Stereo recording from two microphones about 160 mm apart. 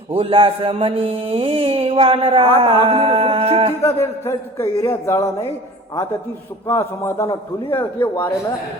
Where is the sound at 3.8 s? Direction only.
15° left (ahead or behind).